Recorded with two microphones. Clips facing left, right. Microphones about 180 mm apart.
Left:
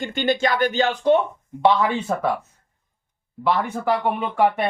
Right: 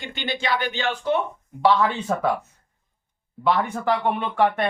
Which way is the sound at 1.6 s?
20° left (ahead or behind).